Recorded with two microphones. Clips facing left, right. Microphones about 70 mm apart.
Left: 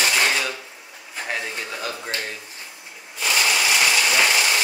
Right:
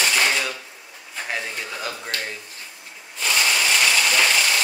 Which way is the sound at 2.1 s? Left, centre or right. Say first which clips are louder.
Right 1 dB; left.